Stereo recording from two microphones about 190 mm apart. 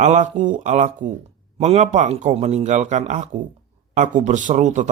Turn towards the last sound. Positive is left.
turn(degrees=-40)  # may be behind; listen again after turning